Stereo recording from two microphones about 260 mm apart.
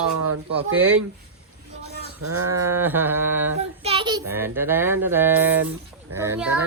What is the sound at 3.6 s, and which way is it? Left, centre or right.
Child singing, right.